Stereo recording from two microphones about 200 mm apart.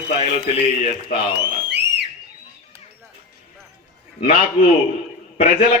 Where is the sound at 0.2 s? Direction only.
30° left (ahead or behind).